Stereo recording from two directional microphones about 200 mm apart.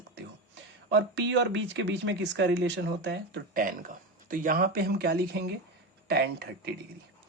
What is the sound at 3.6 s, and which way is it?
Speech, 45° right (ahead or behind).